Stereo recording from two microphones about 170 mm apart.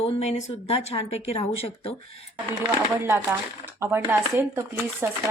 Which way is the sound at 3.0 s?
15° right (ahead or behind).